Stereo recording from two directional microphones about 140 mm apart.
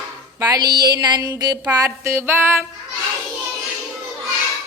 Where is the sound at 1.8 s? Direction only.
20° right (ahead or behind).